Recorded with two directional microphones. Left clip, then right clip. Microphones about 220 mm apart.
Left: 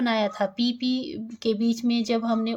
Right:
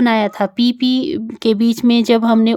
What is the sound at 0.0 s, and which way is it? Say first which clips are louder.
Speech: right 9 dB; 40° right (ahead or behind).